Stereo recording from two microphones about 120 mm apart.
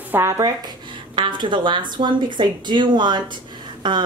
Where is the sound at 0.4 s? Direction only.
35° right (ahead or behind).